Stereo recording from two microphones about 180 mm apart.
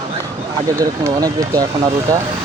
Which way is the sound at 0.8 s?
20° right (ahead or behind).